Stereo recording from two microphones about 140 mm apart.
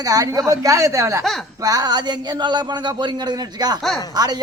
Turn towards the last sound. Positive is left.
turn(degrees=-30)  # may be behind; listen again after turning